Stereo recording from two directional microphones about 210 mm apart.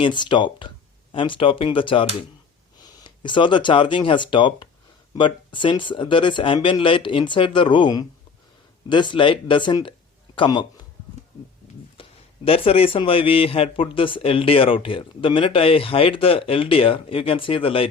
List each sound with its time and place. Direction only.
0.0 s speech: 20° left (ahead or behind)
12.0 s a sound: 25° left (ahead or behind)
12.5 s speech: 25° left (ahead or behind)